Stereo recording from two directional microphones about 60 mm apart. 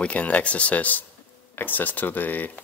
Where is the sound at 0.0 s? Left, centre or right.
Left.